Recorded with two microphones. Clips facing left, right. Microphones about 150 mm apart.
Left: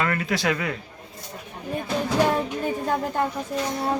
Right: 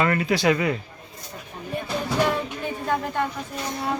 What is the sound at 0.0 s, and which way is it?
Speech, 5° right (ahead or behind).